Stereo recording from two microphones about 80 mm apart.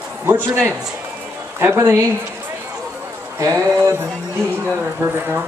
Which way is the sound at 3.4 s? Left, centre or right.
Right.